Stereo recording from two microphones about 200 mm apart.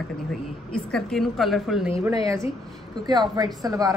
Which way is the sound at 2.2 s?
15° right (ahead or behind).